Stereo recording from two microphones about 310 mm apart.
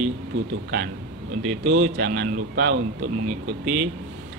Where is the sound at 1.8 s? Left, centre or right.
Right.